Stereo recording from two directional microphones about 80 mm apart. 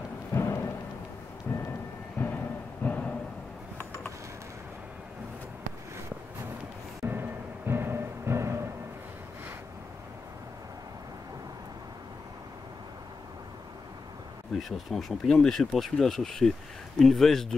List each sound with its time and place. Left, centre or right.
0.3 s music: left
1.5 s vehicle: left
2.1 s a sound: left
7.1 s music: right
14.6 s speech: centre